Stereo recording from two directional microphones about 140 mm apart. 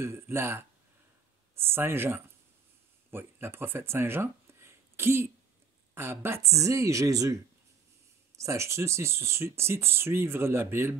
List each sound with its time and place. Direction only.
0.0 s a woman's voice: 20° right (ahead or behind)
8.4 s speech: 20° right (ahead or behind)